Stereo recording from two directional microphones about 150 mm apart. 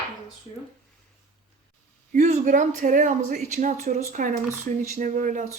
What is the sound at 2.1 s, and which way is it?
Speech, 50° right (ahead or behind).